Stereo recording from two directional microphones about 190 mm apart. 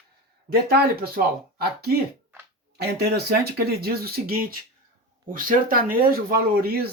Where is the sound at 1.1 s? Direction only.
55° right (ahead or behind).